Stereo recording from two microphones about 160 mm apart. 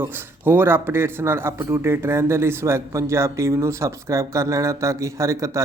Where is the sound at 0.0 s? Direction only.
15° right (ahead or behind).